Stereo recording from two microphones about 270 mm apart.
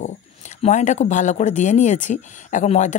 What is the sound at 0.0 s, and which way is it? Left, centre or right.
Speech, left.